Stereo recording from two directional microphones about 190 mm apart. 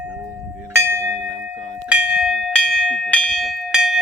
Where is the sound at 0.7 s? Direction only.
15° right (ahead or behind).